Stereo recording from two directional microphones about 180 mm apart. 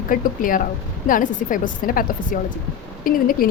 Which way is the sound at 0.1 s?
50° left (ahead or behind).